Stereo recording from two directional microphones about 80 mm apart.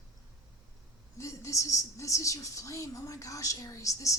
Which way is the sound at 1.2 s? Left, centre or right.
Left.